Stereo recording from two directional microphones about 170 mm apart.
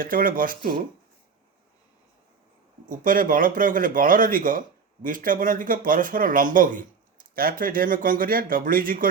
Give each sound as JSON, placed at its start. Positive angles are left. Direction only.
{"t": 0.0, "sound": "speech", "side_deg": -55}
{"t": 2.9, "sound": "speech", "side_deg": -55}